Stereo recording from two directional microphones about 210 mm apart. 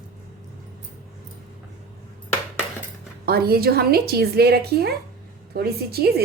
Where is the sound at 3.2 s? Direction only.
50° right (ahead or behind).